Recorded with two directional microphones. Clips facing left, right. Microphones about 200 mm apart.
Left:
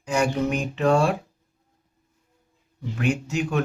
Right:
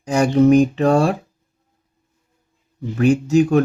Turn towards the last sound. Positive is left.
turn(degrees=-40)  # may be behind; listen again after turning